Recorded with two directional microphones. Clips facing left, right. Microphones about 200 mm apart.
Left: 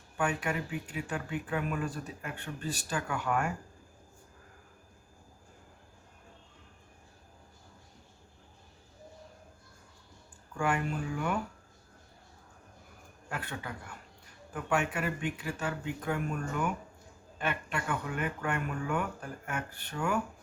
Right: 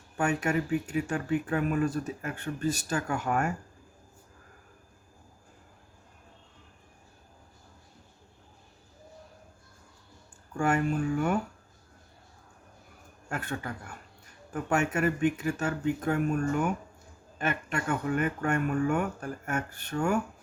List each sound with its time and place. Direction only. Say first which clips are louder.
0.2 s speech: right 5 dB; 45° right (ahead or behind)
10.6 s speech: right 5 dB; 45° right (ahead or behind)
13.2 s speech: right 5 dB; 45° right (ahead or behind)